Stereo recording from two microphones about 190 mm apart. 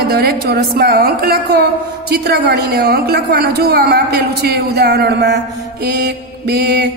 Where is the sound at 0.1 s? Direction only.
55° right (ahead or behind).